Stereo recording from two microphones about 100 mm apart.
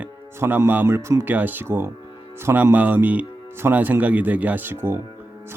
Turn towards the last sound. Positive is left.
turn(degrees=-20)  # may be behind; listen again after turning